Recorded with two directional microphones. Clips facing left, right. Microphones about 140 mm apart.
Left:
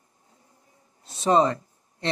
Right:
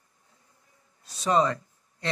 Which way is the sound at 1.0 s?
25° left (ahead or behind).